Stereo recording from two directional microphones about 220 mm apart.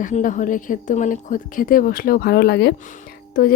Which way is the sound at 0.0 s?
35° left (ahead or behind).